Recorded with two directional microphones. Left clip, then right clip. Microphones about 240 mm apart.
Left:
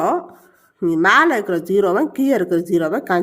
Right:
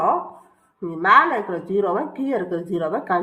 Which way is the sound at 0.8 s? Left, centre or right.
Left.